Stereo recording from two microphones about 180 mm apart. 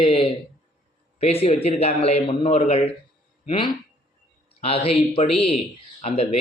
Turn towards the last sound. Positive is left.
turn(degrees=35)  # may be behind; listen again after turning